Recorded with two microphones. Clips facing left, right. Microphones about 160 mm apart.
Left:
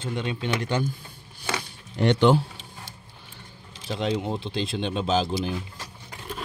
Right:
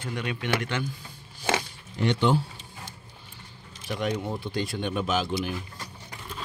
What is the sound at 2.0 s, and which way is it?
Speech, 70° left (ahead or behind).